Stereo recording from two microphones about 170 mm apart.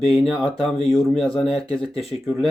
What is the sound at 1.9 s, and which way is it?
Speech, 35° left (ahead or behind).